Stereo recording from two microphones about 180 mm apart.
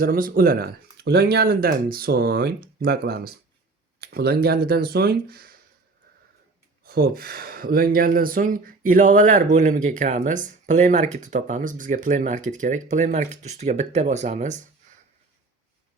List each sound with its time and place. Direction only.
0.0 s speech: 50° right (ahead or behind)
6.8 s speech: 55° right (ahead or behind); by 14.6 s 40° right (ahead or behind)